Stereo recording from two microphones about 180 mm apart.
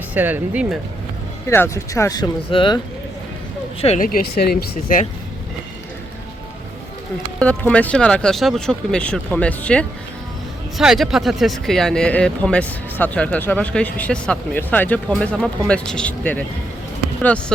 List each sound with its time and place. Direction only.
0.1 s speech: 10° right (ahead or behind)
1.5 s speech: 15° left (ahead or behind); by 4.0 s 35° left (ahead or behind)
4.0 s speech: 55° left (ahead or behind)
7.3 s speech: 5° left (ahead or behind)